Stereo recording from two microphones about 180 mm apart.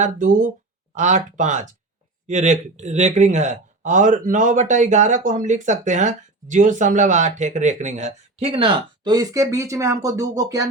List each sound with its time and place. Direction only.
0.0 s speech: 45° right (ahead or behind); by 10.7 s 20° right (ahead or behind)